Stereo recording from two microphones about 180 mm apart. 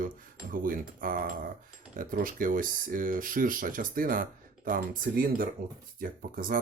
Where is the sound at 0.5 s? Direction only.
50° right (ahead or behind).